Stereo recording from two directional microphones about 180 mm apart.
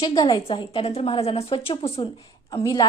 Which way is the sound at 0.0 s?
25° left (ahead or behind).